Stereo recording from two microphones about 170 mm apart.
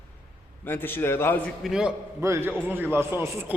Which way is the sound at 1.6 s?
5° right (ahead or behind).